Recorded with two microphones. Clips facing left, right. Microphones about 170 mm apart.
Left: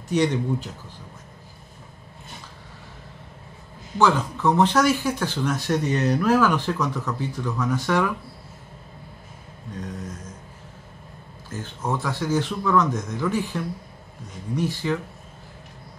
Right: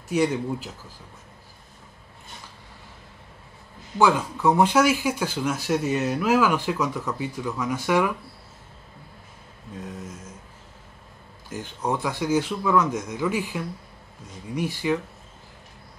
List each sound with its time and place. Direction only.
0.1 s speech: 5° right (ahead or behind)
4.0 s speech: 10° right (ahead or behind)
9.7 s speech: 5° right (ahead or behind)
11.5 s speech: 15° right (ahead or behind)